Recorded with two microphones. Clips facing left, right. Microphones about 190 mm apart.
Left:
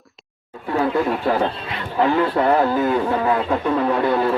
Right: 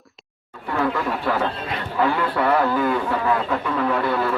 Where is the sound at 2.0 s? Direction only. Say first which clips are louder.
Left 4 dB; 30° left (ahead or behind).